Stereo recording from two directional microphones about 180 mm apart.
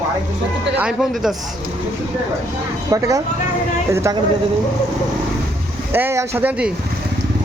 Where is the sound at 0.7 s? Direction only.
5° right (ahead or behind).